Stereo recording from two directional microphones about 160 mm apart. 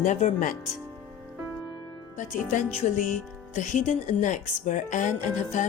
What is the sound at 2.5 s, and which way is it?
Speech, 55° left (ahead or behind).